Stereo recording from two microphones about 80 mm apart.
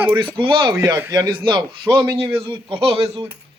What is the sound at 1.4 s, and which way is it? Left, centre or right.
Speech, right.